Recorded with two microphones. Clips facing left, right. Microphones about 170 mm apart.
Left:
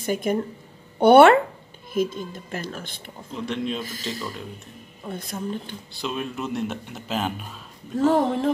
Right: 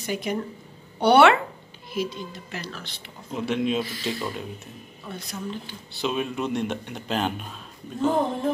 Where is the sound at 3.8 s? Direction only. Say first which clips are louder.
Right 3 dB; 45° left (ahead or behind).